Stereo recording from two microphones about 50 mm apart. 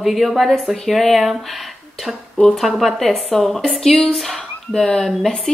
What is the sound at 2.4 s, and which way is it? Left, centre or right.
Speech, centre.